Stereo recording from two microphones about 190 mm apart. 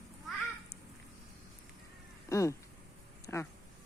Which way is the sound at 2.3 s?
15° left (ahead or behind).